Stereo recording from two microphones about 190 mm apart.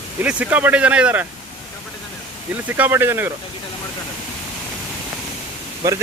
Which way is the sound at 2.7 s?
10° right (ahead or behind).